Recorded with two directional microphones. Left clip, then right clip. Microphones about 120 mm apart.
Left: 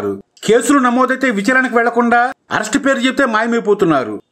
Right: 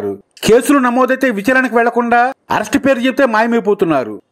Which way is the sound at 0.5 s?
35° right (ahead or behind).